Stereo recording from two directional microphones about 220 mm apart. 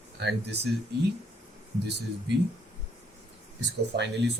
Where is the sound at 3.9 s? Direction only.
45° right (ahead or behind).